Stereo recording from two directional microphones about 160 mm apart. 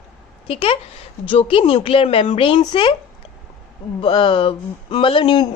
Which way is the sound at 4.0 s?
30° left (ahead or behind).